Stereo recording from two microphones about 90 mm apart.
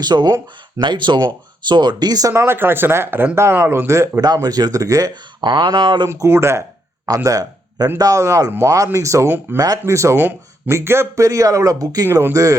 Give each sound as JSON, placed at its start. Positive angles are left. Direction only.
{"t": 0.0, "sound": "speech", "side_deg": -50}
{"t": 2.3, "sound": "speech", "side_deg": -25}
{"t": 4.4, "sound": "speech", "side_deg": -50}
{"t": 5.4, "sound": "speech", "side_deg": -60}
{"t": 6.1, "sound": "speech", "side_deg": -30}
{"t": 7.3, "sound": "a sound", "side_deg": -40}
{"t": 7.9, "sound": "speech", "side_deg": -40}
{"t": 9.8, "sound": "speech", "side_deg": -35}